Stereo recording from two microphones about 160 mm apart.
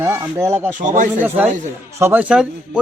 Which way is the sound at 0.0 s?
15° right (ahead or behind).